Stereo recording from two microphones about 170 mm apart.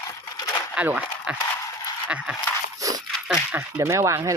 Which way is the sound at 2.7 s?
20° right (ahead or behind).